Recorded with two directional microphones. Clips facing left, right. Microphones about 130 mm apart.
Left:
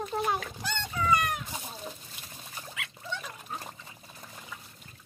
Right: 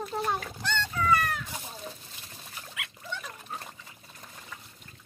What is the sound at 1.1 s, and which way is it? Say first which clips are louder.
Chicken: even; 20° left (ahead or behind).